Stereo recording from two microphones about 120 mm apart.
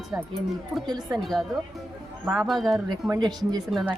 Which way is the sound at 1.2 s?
Centre (ahead or behind).